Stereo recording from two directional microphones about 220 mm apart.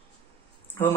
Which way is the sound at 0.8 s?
10° left (ahead or behind).